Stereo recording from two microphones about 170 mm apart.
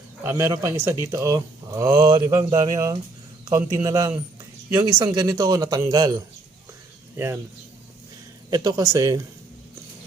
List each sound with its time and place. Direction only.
0.3 s a man's voice: 15° right (ahead or behind)
8.4 s speech: 20° right (ahead or behind)